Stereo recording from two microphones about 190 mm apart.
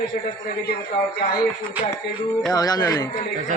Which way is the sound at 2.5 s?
20° left (ahead or behind).